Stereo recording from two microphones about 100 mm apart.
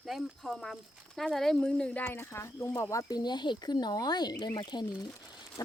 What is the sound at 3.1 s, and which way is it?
Speech, 45° left (ahead or behind).